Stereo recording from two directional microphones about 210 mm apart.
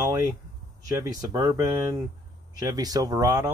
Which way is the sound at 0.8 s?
15° right (ahead or behind).